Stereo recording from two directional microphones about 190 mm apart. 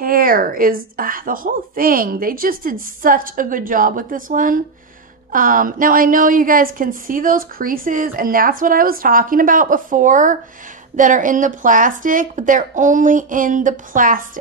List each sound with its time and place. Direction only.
0.0 s a woman's voice: 50° right (ahead or behind)